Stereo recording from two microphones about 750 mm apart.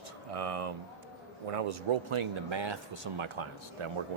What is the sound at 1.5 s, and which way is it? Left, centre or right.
Speech, right.